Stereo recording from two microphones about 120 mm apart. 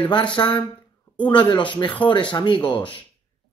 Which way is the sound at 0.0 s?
40° left (ahead or behind).